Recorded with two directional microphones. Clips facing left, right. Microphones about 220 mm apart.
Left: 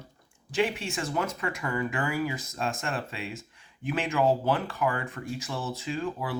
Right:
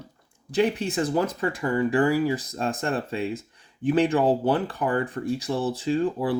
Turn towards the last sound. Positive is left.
turn(degrees=-35)  # may be behind; listen again after turning